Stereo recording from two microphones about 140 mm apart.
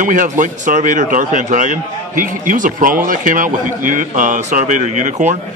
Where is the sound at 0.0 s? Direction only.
65° right (ahead or behind).